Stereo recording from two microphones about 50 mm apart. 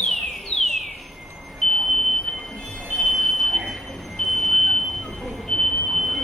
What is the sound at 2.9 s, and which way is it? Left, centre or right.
Smoke detector, centre.